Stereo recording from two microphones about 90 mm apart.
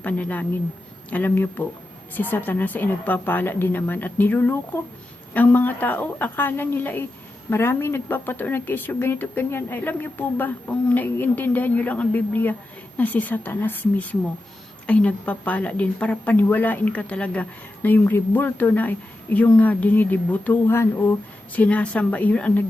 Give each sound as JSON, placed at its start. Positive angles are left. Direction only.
{"t": 0.0, "sound": "a woman's voice", "side_deg": 15}